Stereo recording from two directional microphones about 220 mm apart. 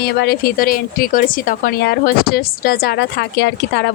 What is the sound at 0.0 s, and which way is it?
A woman's voice, 45° left (ahead or behind).